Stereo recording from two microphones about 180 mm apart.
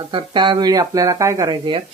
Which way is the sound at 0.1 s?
25° right (ahead or behind).